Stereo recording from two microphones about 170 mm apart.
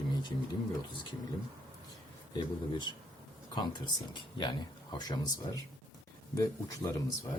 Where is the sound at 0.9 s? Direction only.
30° left (ahead or behind).